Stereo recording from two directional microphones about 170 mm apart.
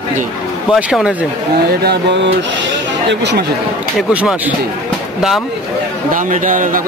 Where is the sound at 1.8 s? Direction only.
75° right (ahead or behind).